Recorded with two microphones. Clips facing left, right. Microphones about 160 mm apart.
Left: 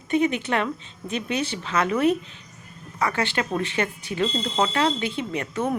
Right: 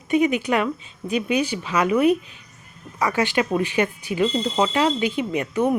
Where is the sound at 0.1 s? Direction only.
10° right (ahead or behind).